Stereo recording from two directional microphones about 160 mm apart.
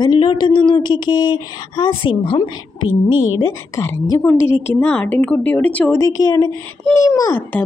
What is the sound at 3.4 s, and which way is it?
A woman's voice, 20° left (ahead or behind).